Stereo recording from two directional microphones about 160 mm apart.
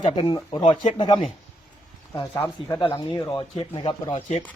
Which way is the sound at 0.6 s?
45° left (ahead or behind).